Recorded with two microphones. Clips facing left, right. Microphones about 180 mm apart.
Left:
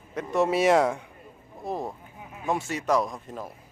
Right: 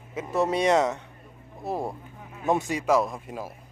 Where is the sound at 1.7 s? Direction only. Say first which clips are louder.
Right 2 dB; 10° right (ahead or behind).